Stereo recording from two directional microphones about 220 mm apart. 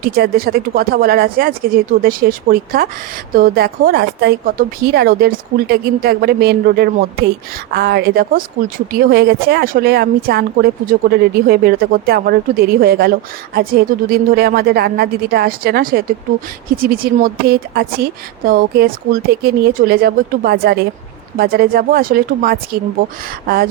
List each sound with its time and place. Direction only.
0.0 s speech: 45° right (ahead or behind)